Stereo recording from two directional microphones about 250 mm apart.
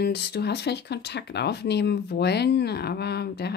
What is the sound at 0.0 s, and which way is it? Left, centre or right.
Speech, left.